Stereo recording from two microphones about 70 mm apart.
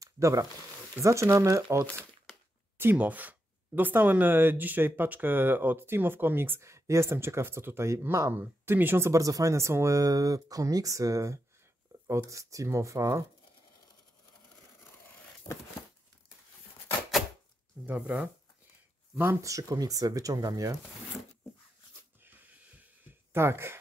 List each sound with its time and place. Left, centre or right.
0.0 s a sound: right
1.0 s speech: right
2.8 s speech: right
8.3 s speech: right
9.1 s speech: right
17.8 s speech: centre
19.4 s speech: right
23.3 s speech: right